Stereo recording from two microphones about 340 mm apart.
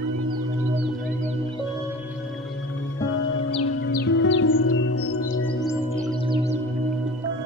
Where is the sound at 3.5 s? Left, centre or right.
Left.